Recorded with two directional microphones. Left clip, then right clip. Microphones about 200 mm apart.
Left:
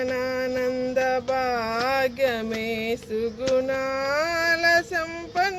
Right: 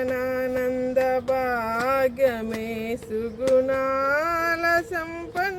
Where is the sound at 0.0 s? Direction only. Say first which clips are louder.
Even; centre (ahead or behind).